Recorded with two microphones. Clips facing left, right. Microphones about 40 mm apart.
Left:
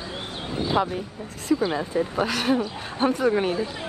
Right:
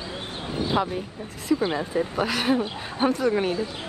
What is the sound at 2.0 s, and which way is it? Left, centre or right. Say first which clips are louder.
Speech: left 1 dB; centre.